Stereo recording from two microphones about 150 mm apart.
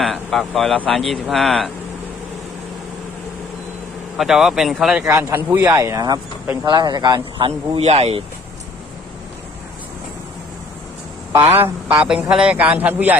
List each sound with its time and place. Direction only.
0.0 s a sound: centre (ahead or behind)
0.8 s speech: centre (ahead or behind)
4.2 s speech: 5° right (ahead or behind)
5.0 s speech: 15° right (ahead or behind); by 8.2 s 45° right (ahead or behind)
11.3 s a man's voice: 15° right (ahead or behind)
12.0 s a man's voice: 5° right (ahead or behind)